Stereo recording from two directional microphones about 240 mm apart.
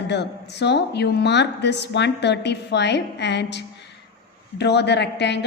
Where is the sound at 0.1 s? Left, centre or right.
Left.